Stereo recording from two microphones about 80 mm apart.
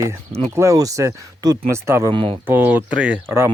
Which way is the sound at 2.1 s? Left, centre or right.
Right.